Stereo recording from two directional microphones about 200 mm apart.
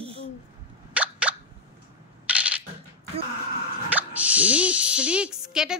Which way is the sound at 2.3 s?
5° right (ahead or behind).